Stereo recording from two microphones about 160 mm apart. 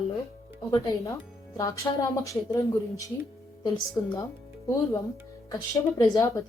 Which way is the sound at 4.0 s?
15° left (ahead or behind).